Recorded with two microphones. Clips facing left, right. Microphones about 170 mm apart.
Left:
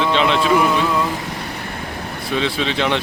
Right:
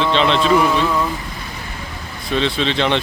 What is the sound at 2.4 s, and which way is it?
Speech, 10° left (ahead or behind).